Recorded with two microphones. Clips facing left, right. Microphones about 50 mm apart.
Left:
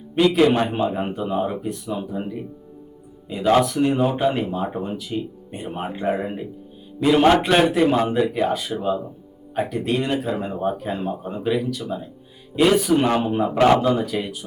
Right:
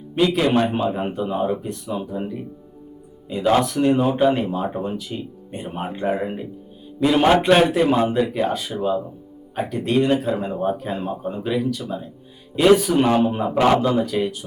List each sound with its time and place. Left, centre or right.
0.7 s speech: centre
3.2 s speech: centre